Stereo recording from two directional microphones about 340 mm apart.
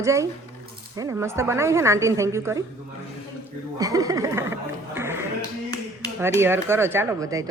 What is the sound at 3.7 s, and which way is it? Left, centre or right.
Music, centre.